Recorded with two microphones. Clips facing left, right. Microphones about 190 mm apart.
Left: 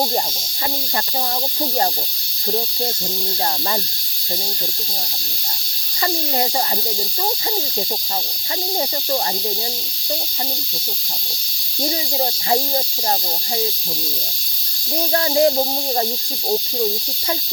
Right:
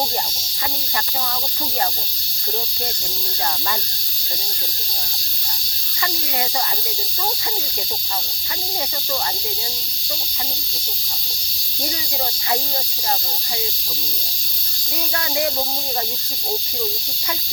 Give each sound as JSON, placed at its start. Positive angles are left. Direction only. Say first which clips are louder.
{"t": 15.1, "sound": "speech", "louder": "left 8 dB", "side_deg": 35}